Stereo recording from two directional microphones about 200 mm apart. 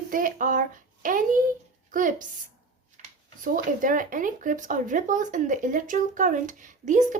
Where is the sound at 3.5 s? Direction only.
40° right (ahead or behind).